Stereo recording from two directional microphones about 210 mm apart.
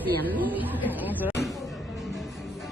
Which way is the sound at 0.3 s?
10° right (ahead or behind).